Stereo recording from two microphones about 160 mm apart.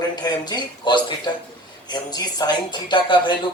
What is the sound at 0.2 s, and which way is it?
A woman's voice, 25° left (ahead or behind).